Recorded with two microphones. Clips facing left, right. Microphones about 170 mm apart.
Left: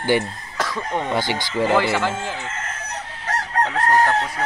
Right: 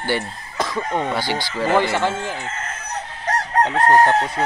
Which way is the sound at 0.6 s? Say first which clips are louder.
Right 2 dB; 15° right (ahead or behind).